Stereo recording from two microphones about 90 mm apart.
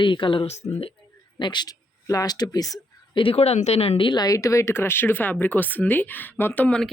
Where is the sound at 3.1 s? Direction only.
80° left.